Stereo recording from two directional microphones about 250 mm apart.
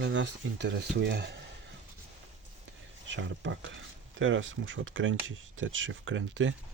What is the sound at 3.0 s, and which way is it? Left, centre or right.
Speech, right.